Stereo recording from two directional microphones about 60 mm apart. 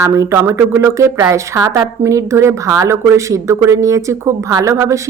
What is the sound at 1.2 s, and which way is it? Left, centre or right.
Speech, right.